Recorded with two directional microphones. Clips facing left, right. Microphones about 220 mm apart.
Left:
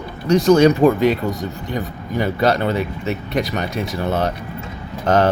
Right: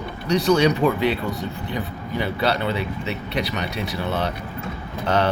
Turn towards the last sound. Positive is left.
turn(degrees=45)  # may be behind; listen again after turning